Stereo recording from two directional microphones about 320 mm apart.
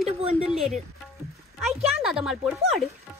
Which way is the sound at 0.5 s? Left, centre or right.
Centre.